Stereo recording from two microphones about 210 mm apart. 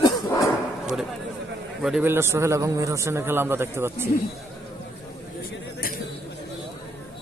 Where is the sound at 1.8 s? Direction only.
5° right (ahead or behind).